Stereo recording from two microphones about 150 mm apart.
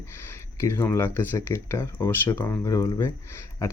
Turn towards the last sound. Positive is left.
turn(degrees=20)  # may be behind; listen again after turning